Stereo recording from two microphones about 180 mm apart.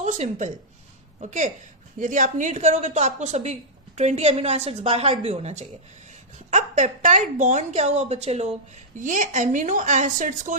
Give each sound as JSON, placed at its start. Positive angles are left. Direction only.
{"t": 0.0, "sound": "a woman's voice", "side_deg": -40}